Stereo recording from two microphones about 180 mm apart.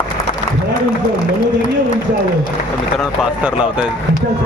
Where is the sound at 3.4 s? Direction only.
5° right (ahead or behind).